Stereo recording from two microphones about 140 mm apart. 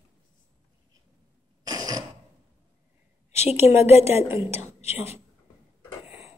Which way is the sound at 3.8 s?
50° left (ahead or behind).